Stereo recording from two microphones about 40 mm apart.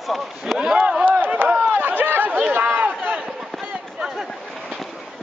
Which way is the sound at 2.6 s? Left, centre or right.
Right.